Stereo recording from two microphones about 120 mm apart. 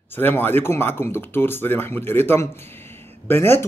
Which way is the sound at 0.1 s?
15° left (ahead or behind).